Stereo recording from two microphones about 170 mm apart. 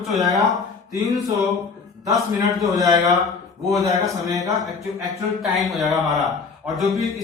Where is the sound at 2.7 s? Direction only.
20° right (ahead or behind).